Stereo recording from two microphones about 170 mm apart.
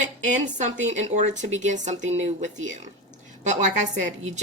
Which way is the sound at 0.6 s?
45° right (ahead or behind).